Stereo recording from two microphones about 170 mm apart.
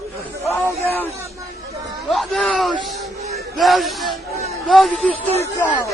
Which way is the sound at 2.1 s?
Centre (ahead or behind).